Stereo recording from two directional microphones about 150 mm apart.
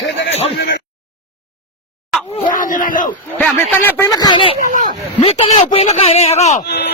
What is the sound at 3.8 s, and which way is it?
Speech, 20° left (ahead or behind).